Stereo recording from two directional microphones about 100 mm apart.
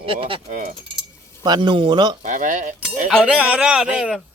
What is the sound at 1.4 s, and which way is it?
Speech, 50° right (ahead or behind).